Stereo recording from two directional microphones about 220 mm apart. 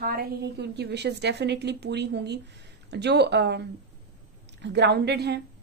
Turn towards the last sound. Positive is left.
turn(degrees=-50)  # may be behind; listen again after turning